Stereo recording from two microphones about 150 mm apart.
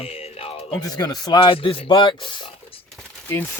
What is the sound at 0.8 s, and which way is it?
Speech, 25° left (ahead or behind).